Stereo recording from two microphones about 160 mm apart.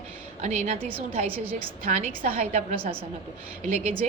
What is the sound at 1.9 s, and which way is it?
A woman's voice, 40° right (ahead or behind).